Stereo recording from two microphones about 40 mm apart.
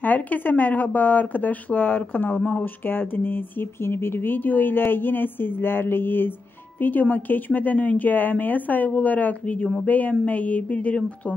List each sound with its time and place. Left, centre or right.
0.0 s speech: left
3.8 s a woman's voice: left
6.8 s speech: left